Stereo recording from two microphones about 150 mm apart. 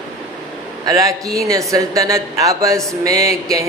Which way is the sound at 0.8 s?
25° right (ahead or behind).